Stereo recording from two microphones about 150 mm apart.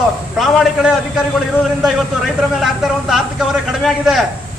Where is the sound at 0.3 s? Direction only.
Centre (ahead or behind).